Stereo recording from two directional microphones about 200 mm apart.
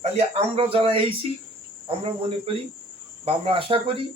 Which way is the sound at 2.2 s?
30° right (ahead or behind).